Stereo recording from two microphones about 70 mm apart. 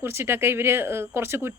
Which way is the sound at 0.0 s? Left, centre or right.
Right.